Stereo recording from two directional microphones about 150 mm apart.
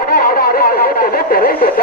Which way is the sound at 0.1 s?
75° left (ahead or behind).